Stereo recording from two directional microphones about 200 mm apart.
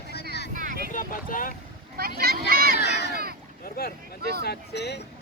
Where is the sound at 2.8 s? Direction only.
55° left (ahead or behind).